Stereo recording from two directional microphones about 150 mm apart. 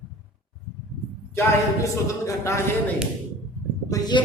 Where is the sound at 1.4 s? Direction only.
20° left (ahead or behind).